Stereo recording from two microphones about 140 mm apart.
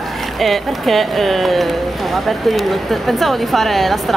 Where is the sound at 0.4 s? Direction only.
Centre (ahead or behind).